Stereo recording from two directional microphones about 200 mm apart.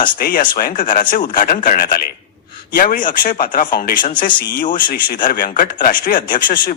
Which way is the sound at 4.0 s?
25° left (ahead or behind).